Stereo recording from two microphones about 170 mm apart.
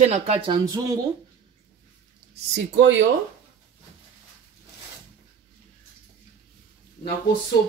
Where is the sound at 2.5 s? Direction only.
90° right.